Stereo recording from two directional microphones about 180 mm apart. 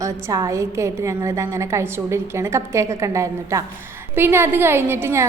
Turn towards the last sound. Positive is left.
turn(degrees=-15)  # may be behind; listen again after turning